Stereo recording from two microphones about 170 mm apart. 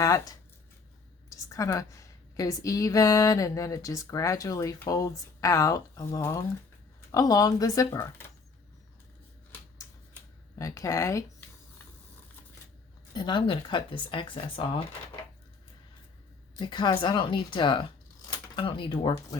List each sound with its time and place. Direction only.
0.0 s a woman's voice: 20° left (ahead or behind)
10.6 s a woman's voice: 20° left (ahead or behind)
13.1 s a woman's voice: 25° left (ahead or behind)
16.6 s a woman's voice: 25° left (ahead or behind)